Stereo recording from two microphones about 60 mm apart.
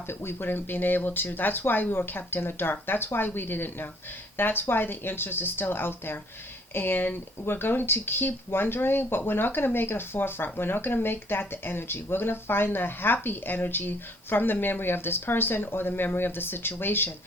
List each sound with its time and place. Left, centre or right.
0.1 s speech: left